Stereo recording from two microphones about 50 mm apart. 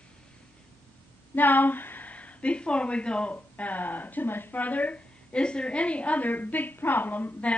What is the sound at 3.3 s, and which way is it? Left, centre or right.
Speech, left.